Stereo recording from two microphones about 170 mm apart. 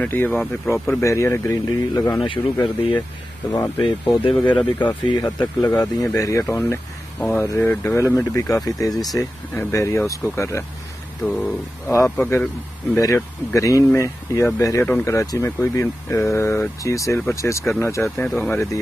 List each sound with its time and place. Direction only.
0.0 s speech: 10° left (ahead or behind)
3.8 s speech: 30° left (ahead or behind); by 18.1 s 15° left (ahead or behind)
18.1 s speech: 5° left (ahead or behind)